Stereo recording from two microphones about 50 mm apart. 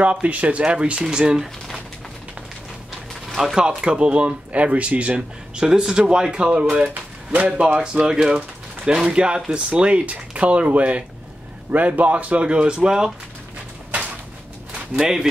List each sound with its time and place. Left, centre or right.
0.0 s speech: right
3.3 s music: centre
3.5 s speech: centre
5.6 s speech: centre
7.3 s speech: right
15.0 s speech: centre